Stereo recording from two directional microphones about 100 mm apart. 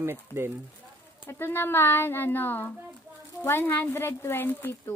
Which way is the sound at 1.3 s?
20° left (ahead or behind).